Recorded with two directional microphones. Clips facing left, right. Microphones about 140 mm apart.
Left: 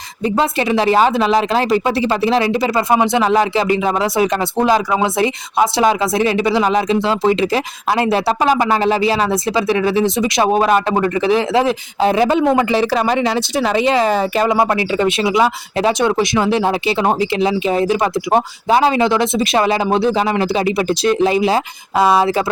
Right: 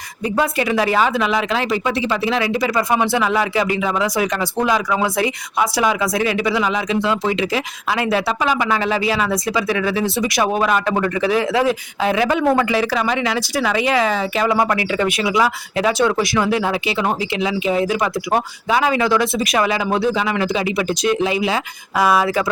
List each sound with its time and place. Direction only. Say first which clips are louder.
0.3 s speech: left 2 dB; 25° left (ahead or behind)
14.1 s speech: left 4 dB; 45° left (ahead or behind)
14.4 s speech: left 2 dB; 25° left (ahead or behind)